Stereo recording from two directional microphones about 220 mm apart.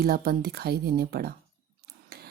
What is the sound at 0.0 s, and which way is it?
A woman's voice, 45° right (ahead or behind).